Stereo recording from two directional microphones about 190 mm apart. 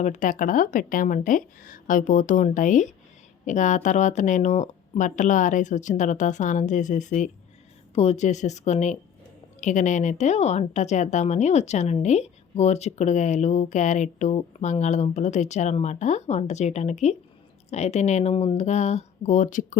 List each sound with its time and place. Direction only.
0.0 s speech: 40° left (ahead or behind)